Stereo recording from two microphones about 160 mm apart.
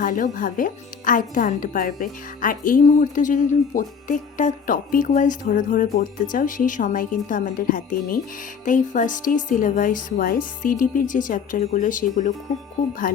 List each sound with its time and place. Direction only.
0.0 s speech: 55° left (ahead or behind)